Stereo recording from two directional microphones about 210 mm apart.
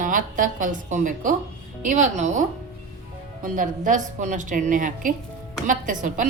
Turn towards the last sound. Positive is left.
turn(degrees=-40)  # may be behind; listen again after turning